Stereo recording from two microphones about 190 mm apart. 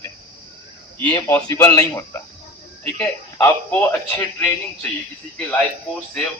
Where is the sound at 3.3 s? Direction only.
10° left (ahead or behind).